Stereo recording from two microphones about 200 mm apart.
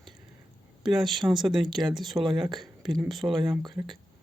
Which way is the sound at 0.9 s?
Centre (ahead or behind).